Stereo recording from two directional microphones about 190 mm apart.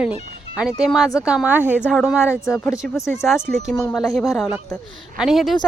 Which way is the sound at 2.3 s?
15° left (ahead or behind).